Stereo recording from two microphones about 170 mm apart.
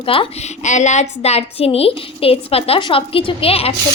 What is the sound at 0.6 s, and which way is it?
A woman's voice, 45° left (ahead or behind).